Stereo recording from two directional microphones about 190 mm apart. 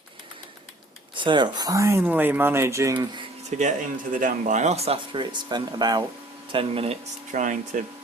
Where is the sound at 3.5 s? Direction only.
40° right (ahead or behind).